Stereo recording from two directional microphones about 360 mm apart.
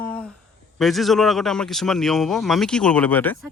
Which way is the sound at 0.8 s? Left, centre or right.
Centre.